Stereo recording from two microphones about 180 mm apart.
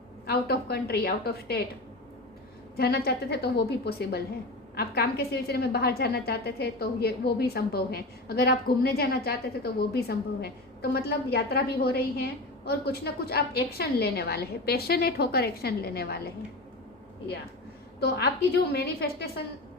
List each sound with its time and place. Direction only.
0.3 s a woman's voice: 60° left (ahead or behind)
2.7 s a woman's voice: 60° left (ahead or behind)
18.0 s a woman's voice: 60° left (ahead or behind)